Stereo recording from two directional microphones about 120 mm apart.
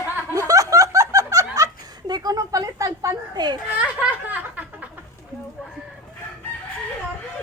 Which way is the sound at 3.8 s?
15° right (ahead or behind).